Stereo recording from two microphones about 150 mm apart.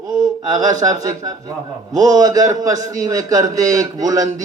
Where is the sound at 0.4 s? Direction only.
25° right (ahead or behind).